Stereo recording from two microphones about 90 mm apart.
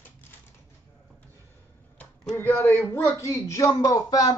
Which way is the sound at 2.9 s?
35° left (ahead or behind).